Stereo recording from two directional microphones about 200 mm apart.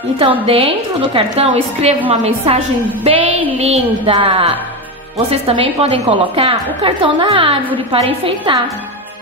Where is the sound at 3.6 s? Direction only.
30° right (ahead or behind).